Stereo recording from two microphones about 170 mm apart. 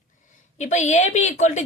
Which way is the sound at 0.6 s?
45° left (ahead or behind).